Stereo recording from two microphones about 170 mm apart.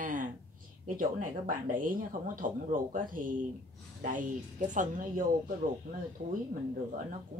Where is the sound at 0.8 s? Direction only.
50° right (ahead or behind).